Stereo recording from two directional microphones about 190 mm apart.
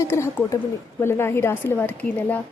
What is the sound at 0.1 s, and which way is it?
Speech, 15° left (ahead or behind).